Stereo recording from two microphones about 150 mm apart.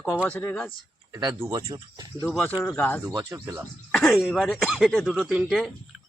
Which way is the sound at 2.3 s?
10° left (ahead or behind).